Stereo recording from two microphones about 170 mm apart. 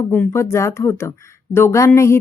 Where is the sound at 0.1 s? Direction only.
15° left (ahead or behind).